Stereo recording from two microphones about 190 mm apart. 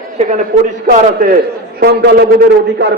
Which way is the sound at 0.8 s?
45° right (ahead or behind).